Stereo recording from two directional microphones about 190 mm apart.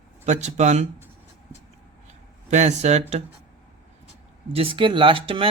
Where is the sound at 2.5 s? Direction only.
35° right (ahead or behind).